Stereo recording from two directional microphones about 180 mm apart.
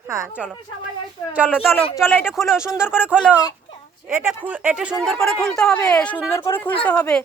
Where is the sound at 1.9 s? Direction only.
10° left (ahead or behind).